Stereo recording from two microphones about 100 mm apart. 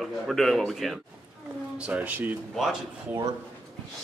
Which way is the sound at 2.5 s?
Centre (ahead or behind).